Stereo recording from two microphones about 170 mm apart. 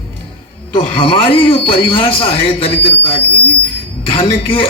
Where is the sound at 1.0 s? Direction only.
35° left (ahead or behind).